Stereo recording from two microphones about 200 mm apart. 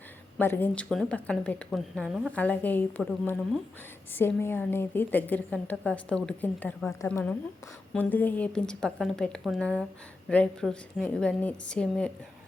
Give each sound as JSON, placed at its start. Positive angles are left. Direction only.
{"t": 0.3, "sound": "a woman's voice", "side_deg": 10}
{"t": 2.3, "sound": "a woman's voice", "side_deg": 5}